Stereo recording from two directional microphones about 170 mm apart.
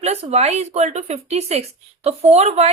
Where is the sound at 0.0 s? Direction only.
40° right (ahead or behind).